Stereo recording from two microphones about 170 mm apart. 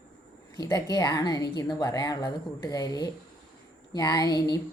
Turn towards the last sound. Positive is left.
turn(degrees=25)  # may be behind; listen again after turning